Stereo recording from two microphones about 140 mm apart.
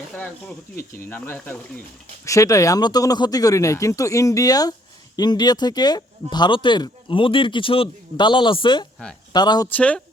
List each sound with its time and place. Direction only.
0.1 s speech: 10° left (ahead or behind); by 9.6 s 30° left (ahead or behind)
9.6 s speech: 10° left (ahead or behind)